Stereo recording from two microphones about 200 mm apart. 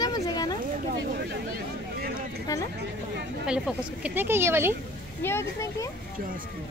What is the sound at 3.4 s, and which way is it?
A woman's voice, 5° right (ahead or behind).